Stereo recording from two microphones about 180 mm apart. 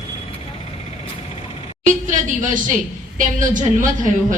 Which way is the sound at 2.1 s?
45° right (ahead or behind).